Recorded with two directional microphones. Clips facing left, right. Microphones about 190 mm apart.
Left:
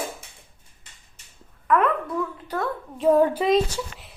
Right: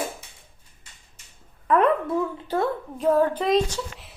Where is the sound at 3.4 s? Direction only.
Centre (ahead or behind).